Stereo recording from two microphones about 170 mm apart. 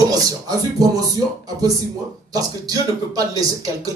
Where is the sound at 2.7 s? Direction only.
20° right (ahead or behind).